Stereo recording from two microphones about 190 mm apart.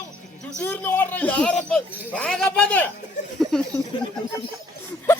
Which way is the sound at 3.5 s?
5° left (ahead or behind).